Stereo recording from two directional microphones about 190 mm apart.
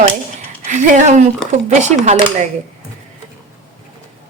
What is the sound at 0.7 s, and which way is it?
Speech, 40° right (ahead or behind).